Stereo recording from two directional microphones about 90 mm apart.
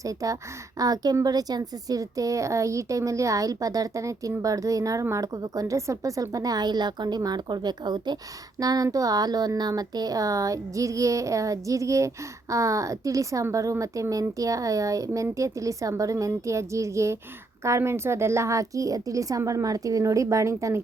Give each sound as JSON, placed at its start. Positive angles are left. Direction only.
{"t": 0.0, "sound": "a woman's voice", "side_deg": -40}